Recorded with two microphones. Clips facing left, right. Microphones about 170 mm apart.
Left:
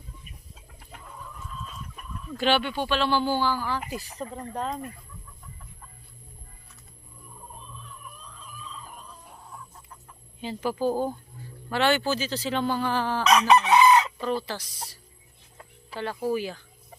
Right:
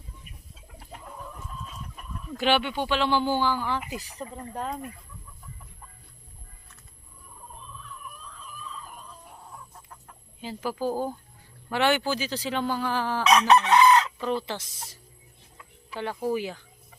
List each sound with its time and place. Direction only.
2.4 s speech: 15° right (ahead or behind)
10.4 s a woman's voice: 5° right (ahead or behind)
13.5 s chicken: 5° left (ahead or behind)
14.2 s speech: 20° right (ahead or behind)
16.3 s speech: 15° right (ahead or behind)